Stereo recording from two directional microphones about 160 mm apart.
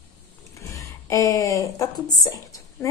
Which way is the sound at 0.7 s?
20° left (ahead or behind).